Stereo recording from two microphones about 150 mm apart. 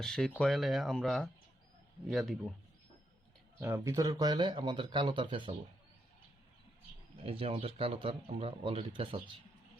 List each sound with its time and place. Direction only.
0.0 s speech: 5° left (ahead or behind)
3.6 s speech: 20° right (ahead or behind)
7.3 s speech: 40° right (ahead or behind)